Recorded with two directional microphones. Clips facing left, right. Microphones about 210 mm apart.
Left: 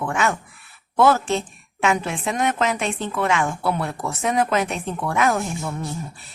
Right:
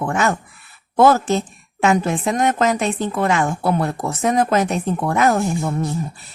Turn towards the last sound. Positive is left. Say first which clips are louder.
# right 6 dB
turn(degrees=-40)  # may be behind; listen again after turning